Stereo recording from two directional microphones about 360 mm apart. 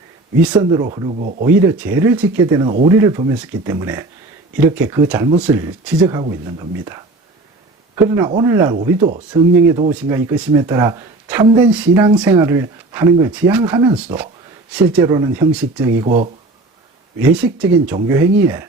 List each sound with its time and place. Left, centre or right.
0.4 s speech: centre
1.5 s speech: centre
16.0 s speech: right
17.2 s speech: centre